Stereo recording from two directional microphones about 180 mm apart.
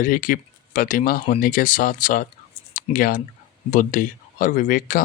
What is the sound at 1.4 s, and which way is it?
Speech, 50° left (ahead or behind).